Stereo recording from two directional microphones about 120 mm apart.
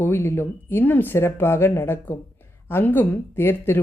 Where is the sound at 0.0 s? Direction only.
20° left (ahead or behind).